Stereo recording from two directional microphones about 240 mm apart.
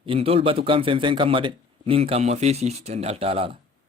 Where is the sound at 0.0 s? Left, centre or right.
Right.